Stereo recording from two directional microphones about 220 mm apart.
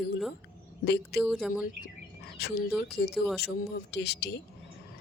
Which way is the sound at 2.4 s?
45° left (ahead or behind).